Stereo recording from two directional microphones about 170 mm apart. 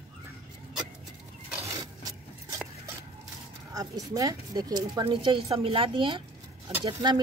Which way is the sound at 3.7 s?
20° right (ahead or behind).